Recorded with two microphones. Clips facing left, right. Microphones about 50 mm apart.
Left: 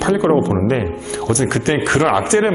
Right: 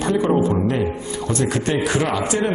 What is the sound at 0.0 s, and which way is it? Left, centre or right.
A man's voice, left.